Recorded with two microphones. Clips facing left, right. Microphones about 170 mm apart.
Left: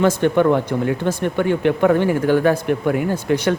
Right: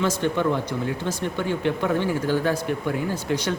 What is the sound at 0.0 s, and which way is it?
Speech, 55° left (ahead or behind).